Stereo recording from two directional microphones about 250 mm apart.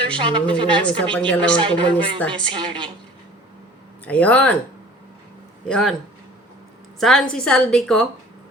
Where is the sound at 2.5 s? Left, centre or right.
Centre.